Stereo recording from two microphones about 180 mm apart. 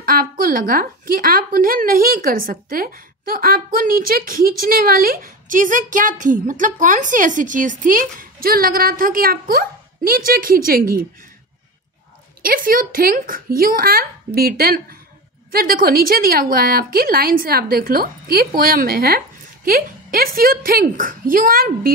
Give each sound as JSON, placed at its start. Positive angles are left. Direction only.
{"t": 0.0, "sound": "a woman's voice", "side_deg": -55}
{"t": 12.4, "sound": "a woman's voice", "side_deg": -50}